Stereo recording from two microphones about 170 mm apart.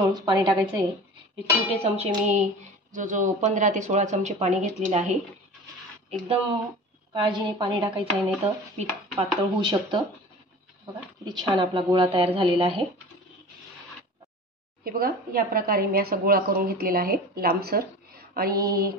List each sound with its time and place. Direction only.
0.1 s speech: 25° right (ahead or behind)
1.8 s speech: 40° right (ahead or behind)
7.2 s speech: 30° right (ahead or behind)
9.4 s speech: 25° right (ahead or behind)
11.2 s speech: 25° right (ahead or behind)
14.9 s a woman's voice: 55° right (ahead or behind)